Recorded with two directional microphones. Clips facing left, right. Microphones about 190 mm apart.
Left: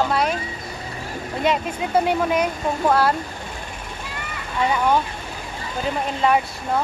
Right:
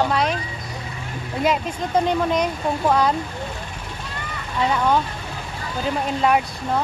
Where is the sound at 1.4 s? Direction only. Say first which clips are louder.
Even; 5° left (ahead or behind).